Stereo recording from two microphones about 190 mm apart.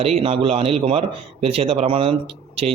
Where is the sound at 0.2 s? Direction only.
30° right (ahead or behind).